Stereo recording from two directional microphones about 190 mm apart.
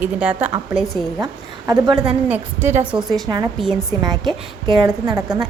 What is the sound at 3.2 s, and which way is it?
A woman's voice, 20° right (ahead or behind).